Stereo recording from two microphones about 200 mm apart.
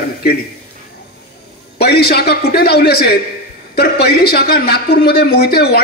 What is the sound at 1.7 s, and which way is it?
A man's voice, 50° left (ahead or behind).